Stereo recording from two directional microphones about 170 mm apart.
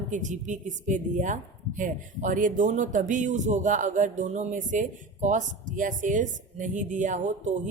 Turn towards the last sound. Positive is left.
turn(degrees=-45)  # may be behind; listen again after turning